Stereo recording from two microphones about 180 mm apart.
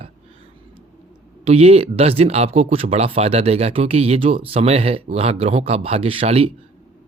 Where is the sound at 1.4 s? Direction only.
35° right (ahead or behind).